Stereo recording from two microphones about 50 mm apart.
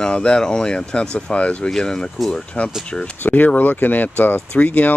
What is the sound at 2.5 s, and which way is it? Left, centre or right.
Speech, left.